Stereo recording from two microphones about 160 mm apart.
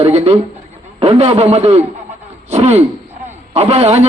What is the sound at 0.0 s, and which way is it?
A man's voice, 40° right (ahead or behind).